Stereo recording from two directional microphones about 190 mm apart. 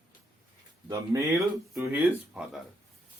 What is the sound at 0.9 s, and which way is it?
Speech, 15° right (ahead or behind).